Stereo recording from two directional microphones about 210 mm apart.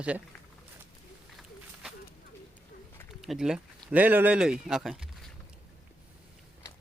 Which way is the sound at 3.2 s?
Centre (ahead or behind).